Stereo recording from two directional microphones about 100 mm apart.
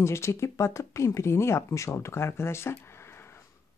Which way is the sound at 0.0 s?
25° left (ahead or behind).